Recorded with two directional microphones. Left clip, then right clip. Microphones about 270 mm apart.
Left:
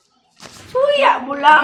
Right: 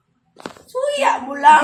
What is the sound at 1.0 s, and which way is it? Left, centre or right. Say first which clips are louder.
Speech: right 4 dB; right.